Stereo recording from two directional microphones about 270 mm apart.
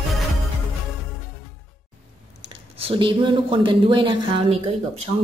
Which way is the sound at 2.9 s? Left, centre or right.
Centre.